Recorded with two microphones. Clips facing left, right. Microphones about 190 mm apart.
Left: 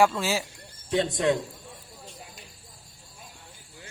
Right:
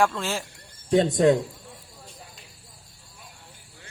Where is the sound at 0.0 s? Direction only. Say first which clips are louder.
Left 2 dB; 5° left (ahead or behind).